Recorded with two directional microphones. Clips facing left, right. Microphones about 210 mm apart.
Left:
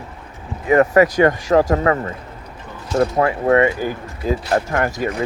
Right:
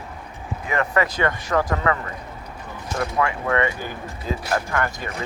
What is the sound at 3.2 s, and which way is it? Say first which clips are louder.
Speech: left 6 dB; 35° left (ahead or behind).